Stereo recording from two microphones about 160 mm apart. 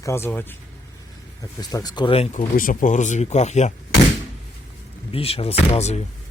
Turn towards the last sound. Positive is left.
turn(degrees=40)  # may be behind; listen again after turning